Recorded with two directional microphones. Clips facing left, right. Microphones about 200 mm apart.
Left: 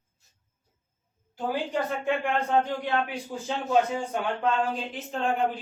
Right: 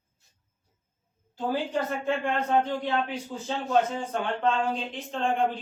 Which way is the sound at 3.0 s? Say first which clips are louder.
Even; 10° left (ahead or behind).